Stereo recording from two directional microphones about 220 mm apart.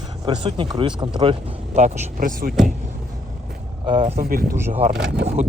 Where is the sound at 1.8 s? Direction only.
30° right (ahead or behind).